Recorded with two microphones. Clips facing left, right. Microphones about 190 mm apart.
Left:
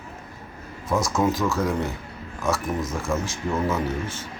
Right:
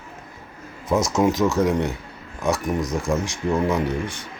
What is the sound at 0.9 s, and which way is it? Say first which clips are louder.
Speech: right 3 dB; 20° right (ahead or behind).